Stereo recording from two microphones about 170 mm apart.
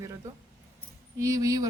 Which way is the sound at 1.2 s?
20° right (ahead or behind).